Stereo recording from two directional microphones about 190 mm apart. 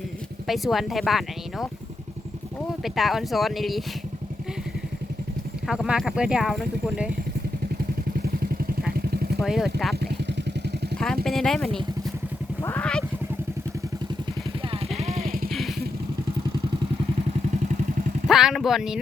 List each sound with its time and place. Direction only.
0.4 s speech: centre (ahead or behind)
2.8 s speech: centre (ahead or behind)
5.6 s speech: 5° right (ahead or behind)
9.0 s vehicle: 55° right (ahead or behind)
9.4 s speech: centre (ahead or behind)
10.9 s speech: 5° left (ahead or behind)
14.7 s vehicle: 35° right (ahead or behind)
15.4 s vehicle: centre (ahead or behind)
18.3 s speech: centre (ahead or behind)